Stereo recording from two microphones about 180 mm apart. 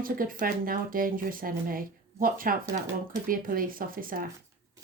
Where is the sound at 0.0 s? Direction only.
50° right (ahead or behind).